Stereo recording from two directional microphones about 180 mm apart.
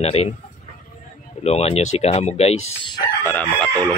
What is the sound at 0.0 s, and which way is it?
Speech, 35° left (ahead or behind).